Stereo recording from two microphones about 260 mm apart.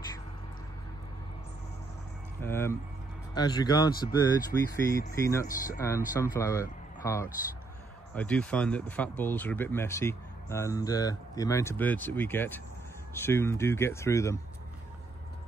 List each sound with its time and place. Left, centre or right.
2.4 s speech: centre